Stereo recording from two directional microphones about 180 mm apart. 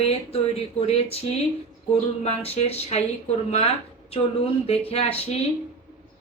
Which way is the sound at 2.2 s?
35° left (ahead or behind).